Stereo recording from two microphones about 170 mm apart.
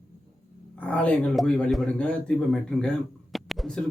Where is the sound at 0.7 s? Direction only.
10° left (ahead or behind).